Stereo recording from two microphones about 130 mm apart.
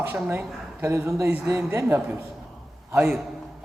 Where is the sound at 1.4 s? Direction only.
25° right (ahead or behind).